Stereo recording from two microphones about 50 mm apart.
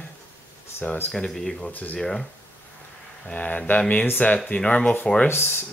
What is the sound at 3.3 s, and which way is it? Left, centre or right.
Speech, left.